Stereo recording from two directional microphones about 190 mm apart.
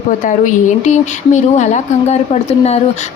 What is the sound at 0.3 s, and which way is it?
Speech, 40° left (ahead or behind).